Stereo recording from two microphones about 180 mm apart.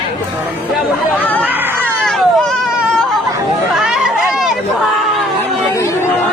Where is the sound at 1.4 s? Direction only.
10° right (ahead or behind).